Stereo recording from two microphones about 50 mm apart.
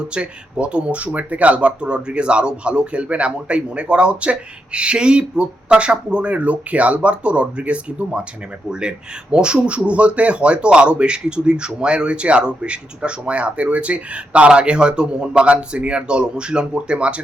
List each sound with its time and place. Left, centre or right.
0.0 s speech: right